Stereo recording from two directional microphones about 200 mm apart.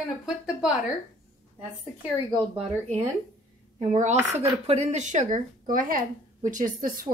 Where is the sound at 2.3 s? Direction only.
30° right (ahead or behind).